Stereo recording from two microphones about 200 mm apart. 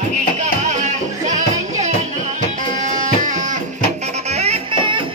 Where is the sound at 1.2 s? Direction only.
35° right (ahead or behind).